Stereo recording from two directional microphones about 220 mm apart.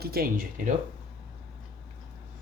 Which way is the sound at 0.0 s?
45° right (ahead or behind).